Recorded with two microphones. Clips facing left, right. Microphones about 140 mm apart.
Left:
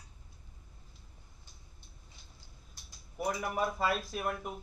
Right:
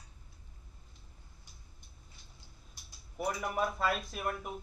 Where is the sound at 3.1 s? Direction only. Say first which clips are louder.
Left 1 dB; centre (ahead or behind).